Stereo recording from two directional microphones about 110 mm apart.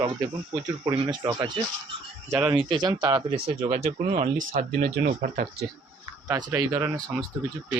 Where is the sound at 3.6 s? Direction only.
75° right (ahead or behind).